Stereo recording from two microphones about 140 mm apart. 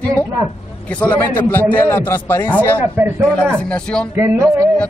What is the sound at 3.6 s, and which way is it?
Speech, 10° left (ahead or behind).